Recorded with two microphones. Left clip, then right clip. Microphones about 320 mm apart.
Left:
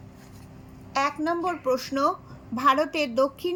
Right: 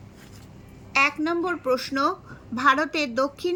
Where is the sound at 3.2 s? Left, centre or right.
Centre.